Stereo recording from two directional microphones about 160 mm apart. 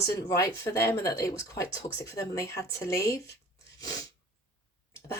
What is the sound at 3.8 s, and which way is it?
Sneeze, 25° left (ahead or behind).